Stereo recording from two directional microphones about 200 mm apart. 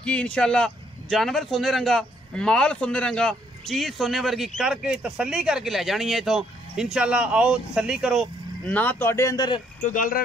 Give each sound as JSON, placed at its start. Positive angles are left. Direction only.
{"t": 0.0, "sound": "a man's voice", "side_deg": 5}
{"t": 9.8, "sound": "speech", "side_deg": 40}